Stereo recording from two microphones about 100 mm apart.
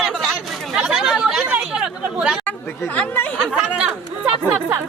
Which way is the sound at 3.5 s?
10° right (ahead or behind).